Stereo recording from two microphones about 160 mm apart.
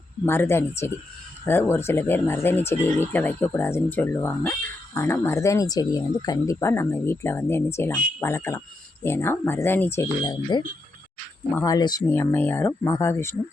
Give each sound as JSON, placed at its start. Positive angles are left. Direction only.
{"t": 0.3, "sound": "speech", "side_deg": 15}
{"t": 11.5, "sound": "speech", "side_deg": 20}